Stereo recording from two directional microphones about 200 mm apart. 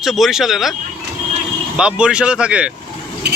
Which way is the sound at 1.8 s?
5° right (ahead or behind).